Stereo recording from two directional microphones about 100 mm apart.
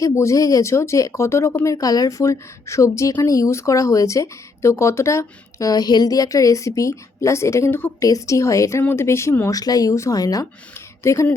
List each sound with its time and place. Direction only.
0.0 s speech: 30° left (ahead or behind)
1.7 s speech: 40° left (ahead or behind)
9.6 s speech: 35° left (ahead or behind)